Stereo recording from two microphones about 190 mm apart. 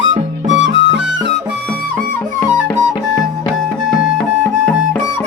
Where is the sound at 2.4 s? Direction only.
15° left (ahead or behind).